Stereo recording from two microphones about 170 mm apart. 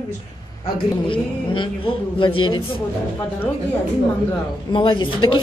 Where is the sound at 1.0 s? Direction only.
30° left (ahead or behind).